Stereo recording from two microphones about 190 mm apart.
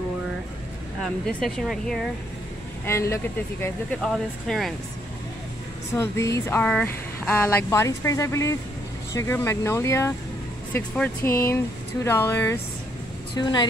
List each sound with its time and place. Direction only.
1.0 s speech: centre (ahead or behind)
2.8 s speech: 15° left (ahead or behind)
5.9 s a woman's voice: 15° left (ahead or behind)